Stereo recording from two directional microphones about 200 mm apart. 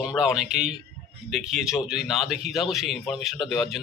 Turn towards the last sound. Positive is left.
turn(degrees=0)  # may be behind; listen again after turning